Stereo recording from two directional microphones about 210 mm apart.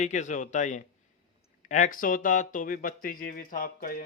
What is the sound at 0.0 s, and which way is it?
Speech, 35° left (ahead or behind).